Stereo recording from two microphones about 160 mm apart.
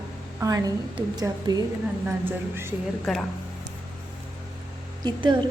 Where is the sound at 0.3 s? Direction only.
20° right (ahead or behind).